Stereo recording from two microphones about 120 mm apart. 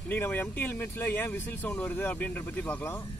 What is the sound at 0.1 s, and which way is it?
Speech, 15° left (ahead or behind).